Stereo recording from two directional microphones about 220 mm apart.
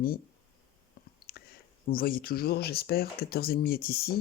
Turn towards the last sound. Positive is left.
turn(degrees=45)  # may be behind; listen again after turning